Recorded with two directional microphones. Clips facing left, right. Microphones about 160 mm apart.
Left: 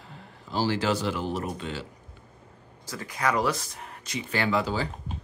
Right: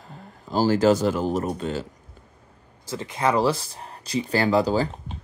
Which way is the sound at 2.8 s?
25° right (ahead or behind).